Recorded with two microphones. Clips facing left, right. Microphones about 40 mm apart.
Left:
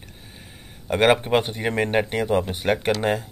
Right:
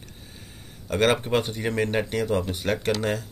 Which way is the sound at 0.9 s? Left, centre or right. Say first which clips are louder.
Left 4 dB; left.